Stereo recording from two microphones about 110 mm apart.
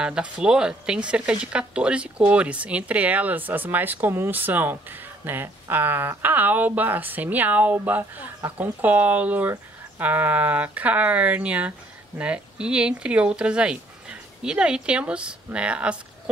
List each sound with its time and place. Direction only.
0.0 s speech: 10° right (ahead or behind)